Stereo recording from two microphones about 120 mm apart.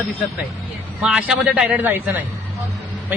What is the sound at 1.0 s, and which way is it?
A man's voice, 5° right (ahead or behind).